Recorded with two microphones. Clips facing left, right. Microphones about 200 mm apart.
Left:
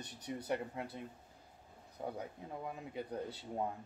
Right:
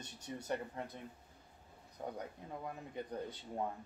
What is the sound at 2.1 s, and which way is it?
Speech, 5° left (ahead or behind).